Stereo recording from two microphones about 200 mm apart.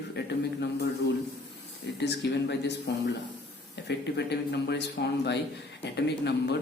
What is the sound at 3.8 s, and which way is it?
Speech, 55° left (ahead or behind).